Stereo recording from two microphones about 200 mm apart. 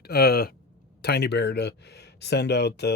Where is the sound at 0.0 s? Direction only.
50° left (ahead or behind).